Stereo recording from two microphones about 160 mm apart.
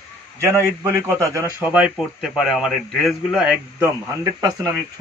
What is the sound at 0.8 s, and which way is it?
Speech, 15° right (ahead or behind).